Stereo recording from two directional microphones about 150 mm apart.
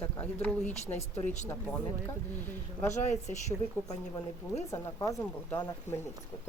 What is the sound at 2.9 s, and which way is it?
Speech, 50° left (ahead or behind).